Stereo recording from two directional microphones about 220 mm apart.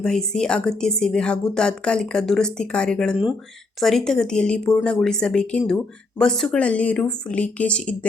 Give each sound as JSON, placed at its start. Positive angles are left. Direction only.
{"t": 0.0, "sound": "speech", "side_deg": 0}